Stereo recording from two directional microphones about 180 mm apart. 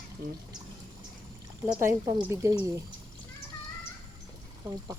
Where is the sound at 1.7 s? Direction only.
15° right (ahead or behind).